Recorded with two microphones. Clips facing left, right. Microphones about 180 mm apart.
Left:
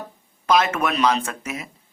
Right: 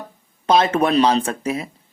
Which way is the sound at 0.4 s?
30° right (ahead or behind).